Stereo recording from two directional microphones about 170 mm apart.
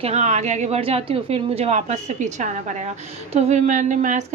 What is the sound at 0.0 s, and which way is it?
A woman's voice, 40° right (ahead or behind).